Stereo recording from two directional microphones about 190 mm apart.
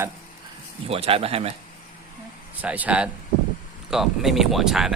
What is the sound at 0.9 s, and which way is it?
Speech, 30° right (ahead or behind).